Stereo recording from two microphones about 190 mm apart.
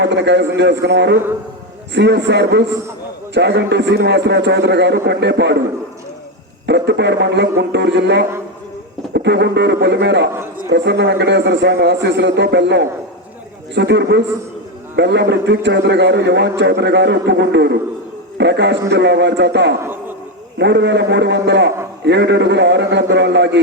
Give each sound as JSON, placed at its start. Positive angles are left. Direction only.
{"t": 0.0, "sound": "a man's voice", "side_deg": -65}
{"t": 6.7, "sound": "a man's voice", "side_deg": -65}
{"t": 19.8, "sound": "a sound", "side_deg": -10}
{"t": 20.6, "sound": "a man's voice", "side_deg": -65}